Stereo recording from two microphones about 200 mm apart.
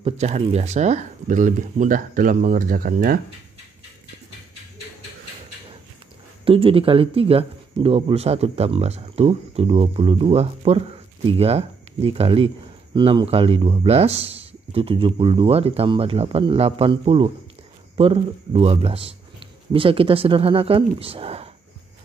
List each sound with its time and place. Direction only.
0.0 s speech: 35° right (ahead or behind)
6.4 s speech: 25° right (ahead or behind)